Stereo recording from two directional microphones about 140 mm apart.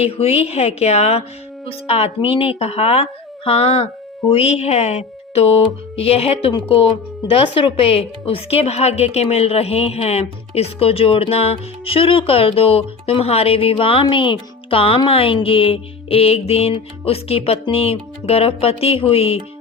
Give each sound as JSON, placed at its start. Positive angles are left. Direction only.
{"t": 0.0, "sound": "speech", "side_deg": 45}